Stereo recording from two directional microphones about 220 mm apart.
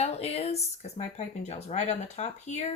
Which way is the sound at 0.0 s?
30° left (ahead or behind).